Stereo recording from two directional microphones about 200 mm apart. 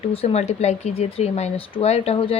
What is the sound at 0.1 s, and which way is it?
Speech, 30° left (ahead or behind).